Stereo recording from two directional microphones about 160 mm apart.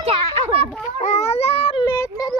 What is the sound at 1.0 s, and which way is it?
Baby cry, 45° left (ahead or behind).